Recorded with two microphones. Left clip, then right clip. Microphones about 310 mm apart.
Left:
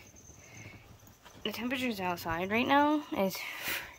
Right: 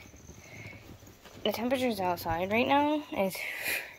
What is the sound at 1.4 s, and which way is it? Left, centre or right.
A woman's voice, centre.